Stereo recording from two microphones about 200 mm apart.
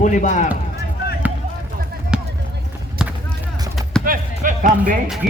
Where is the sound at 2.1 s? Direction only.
5° right (ahead or behind).